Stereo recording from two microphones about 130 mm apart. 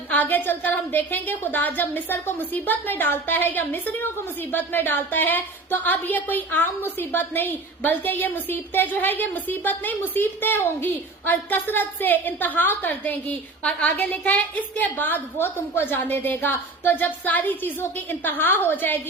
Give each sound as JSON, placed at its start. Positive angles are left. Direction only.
{"t": 0.1, "sound": "a woman's voice", "side_deg": 15}